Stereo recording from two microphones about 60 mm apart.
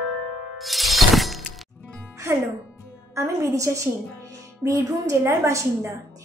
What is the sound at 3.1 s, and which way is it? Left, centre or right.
A woman's voice, right.